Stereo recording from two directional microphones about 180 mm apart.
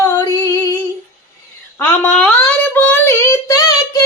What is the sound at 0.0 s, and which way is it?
Female singing, 20° left (ahead or behind).